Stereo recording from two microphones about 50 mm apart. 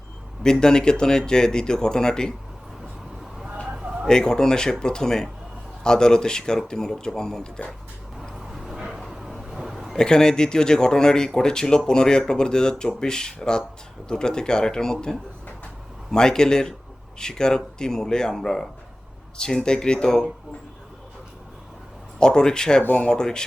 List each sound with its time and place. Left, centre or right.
0.6 s speech: centre
4.0 s speech: centre
8.5 s a sound: centre
9.9 s speech: centre
22.2 s speech: centre